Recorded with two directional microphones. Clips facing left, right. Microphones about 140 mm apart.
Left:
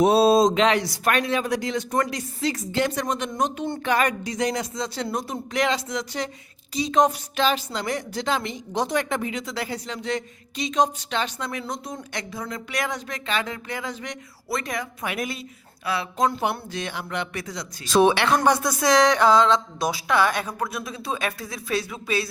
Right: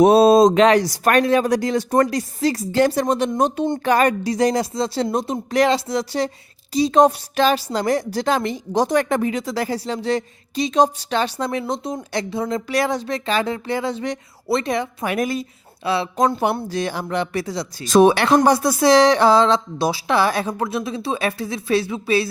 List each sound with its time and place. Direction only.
0.0 s a woman's voice: 55° right (ahead or behind); by 5.4 s 25° right (ahead or behind)
5.5 s a woman's voice: 35° right (ahead or behind)
15.0 s a woman's voice: 45° right (ahead or behind)
15.8 s a woman's voice: 30° right (ahead or behind)
16.1 s a woman's voice: 45° right (ahead or behind); by 22.3 s 30° right (ahead or behind)